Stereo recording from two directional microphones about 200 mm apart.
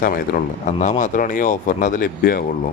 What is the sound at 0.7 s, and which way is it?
A man's voice, 35° left (ahead or behind).